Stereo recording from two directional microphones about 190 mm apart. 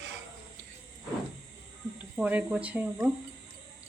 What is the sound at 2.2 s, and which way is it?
Speech, 10° right (ahead or behind).